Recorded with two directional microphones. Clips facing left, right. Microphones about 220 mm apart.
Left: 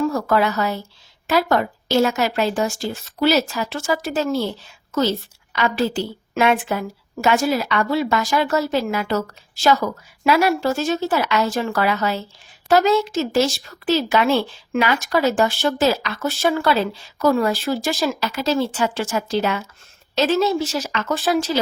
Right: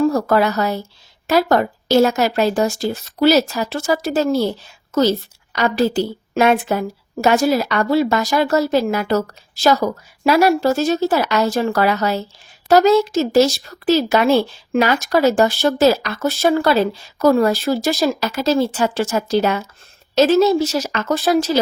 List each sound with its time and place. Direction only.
0.0 s speech: 40° right (ahead or behind)